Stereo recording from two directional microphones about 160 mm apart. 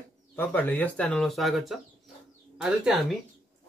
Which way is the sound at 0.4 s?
10° left (ahead or behind).